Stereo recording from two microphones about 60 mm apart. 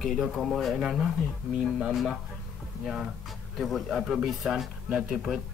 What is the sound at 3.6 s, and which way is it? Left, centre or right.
Speech, centre.